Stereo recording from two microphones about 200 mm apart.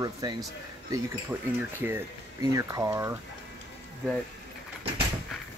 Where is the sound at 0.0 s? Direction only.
20° right (ahead or behind).